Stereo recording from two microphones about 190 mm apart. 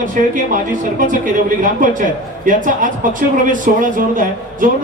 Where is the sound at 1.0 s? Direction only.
45° right (ahead or behind).